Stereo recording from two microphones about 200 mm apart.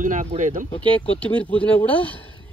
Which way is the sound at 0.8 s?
5° left (ahead or behind).